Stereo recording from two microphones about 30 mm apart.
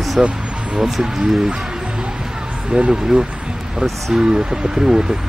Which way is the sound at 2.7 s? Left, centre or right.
Right.